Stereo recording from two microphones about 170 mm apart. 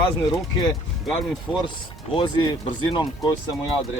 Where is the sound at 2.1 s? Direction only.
25° left (ahead or behind).